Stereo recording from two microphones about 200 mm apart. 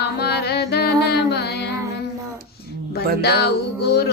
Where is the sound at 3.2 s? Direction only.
50° left (ahead or behind).